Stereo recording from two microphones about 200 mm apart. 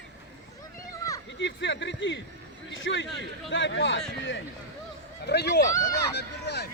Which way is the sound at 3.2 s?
65° left (ahead or behind).